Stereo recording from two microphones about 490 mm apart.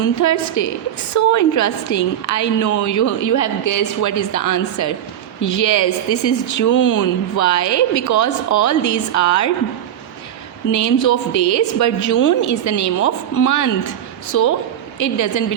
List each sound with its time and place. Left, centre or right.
0.0 s speech: left
10.7 s speech: left